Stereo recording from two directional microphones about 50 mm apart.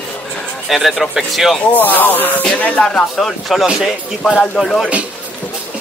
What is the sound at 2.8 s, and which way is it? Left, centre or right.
Speech, centre.